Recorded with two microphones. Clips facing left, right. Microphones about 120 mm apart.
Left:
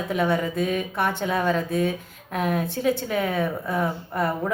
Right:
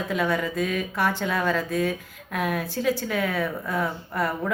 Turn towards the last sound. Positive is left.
turn(degrees=20)  # may be behind; listen again after turning